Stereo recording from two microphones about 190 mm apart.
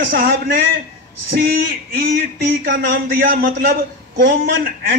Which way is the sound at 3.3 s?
50° right (ahead or behind).